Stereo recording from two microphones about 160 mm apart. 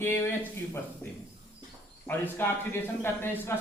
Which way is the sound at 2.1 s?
15° left (ahead or behind).